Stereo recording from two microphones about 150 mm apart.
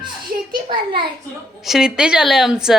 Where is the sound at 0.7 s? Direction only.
35° right (ahead or behind).